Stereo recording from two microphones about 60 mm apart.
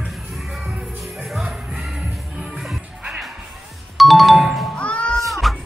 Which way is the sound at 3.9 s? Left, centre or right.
Centre.